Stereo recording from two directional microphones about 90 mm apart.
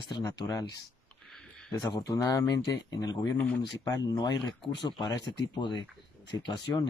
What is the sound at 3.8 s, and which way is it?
Speech, 45° left (ahead or behind).